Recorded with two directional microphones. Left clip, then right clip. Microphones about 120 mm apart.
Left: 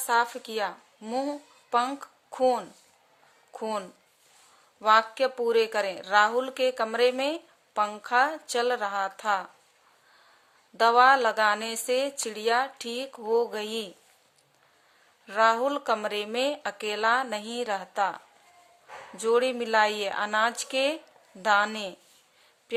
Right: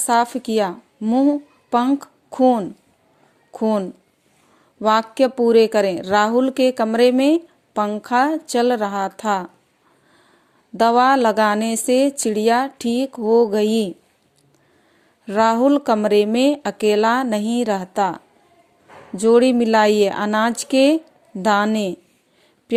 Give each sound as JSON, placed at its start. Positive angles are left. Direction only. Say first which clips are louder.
{"t": 0.0, "sound": "a woman's voice", "louder": "right 8 dB", "side_deg": -50}
{"t": 1.0, "sound": "a woman's voice", "louder": "right 12 dB", "side_deg": -30}
{"t": 10.8, "sound": "speech", "louder": "right 5 dB", "side_deg": -45}
{"t": 15.3, "sound": "a woman's voice", "louder": "right 7 dB", "side_deg": -40}